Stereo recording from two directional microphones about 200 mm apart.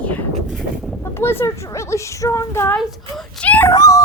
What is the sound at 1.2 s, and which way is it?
A child's voice, 10° left (ahead or behind).